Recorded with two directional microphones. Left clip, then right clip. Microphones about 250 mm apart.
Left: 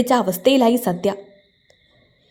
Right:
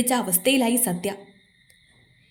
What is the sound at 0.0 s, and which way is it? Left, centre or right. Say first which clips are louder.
A woman's voice: left 6 dB; left.